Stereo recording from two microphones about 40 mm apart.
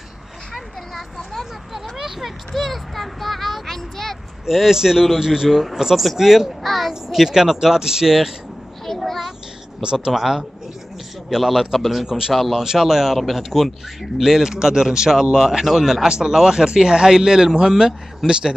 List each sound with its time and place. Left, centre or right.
1.7 s speech: centre
2.5 s speech: centre
4.5 s speech: centre
5.5 s speech: centre
6.6 s speech: centre
6.9 s speech: centre
8.8 s child singing: centre
9.8 s speech: centre
12.6 s speech: centre
14.2 s a man's voice: centre